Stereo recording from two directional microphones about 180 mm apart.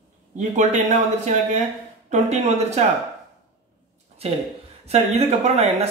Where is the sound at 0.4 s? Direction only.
40° right (ahead or behind).